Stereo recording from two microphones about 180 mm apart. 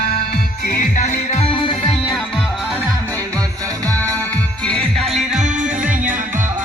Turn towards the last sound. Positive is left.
turn(degrees=5)  # may be behind; listen again after turning